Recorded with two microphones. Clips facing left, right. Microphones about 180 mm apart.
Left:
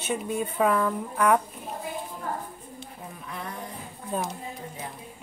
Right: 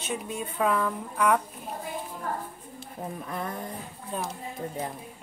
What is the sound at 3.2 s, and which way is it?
Speech, 45° right (ahead or behind).